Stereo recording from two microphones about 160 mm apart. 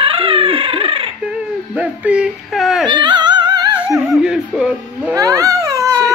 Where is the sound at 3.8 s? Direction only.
5° right (ahead or behind).